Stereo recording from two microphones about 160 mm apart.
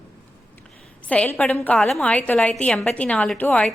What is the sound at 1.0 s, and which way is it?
A woman's voice, 10° left (ahead or behind).